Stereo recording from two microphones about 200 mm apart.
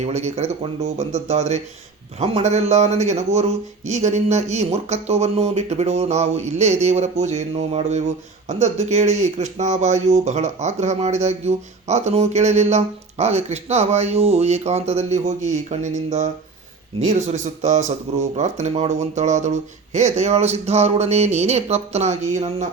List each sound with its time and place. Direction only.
0.0 s speech: 35° right (ahead or behind)